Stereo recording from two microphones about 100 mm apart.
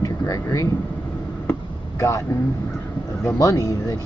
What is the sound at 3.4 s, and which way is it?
Speech, 35° left (ahead or behind).